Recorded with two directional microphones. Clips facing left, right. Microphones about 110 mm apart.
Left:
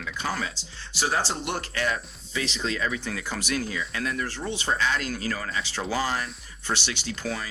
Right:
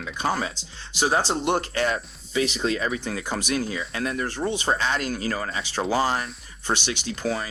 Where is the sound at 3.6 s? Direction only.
30° right (ahead or behind).